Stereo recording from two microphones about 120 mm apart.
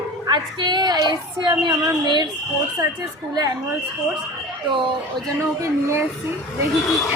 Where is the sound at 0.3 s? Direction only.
40° right (ahead or behind).